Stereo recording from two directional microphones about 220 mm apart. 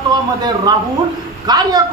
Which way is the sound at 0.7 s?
15° right (ahead or behind).